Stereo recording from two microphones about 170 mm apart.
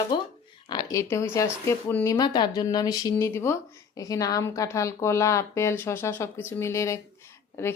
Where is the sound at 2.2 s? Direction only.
25° left (ahead or behind).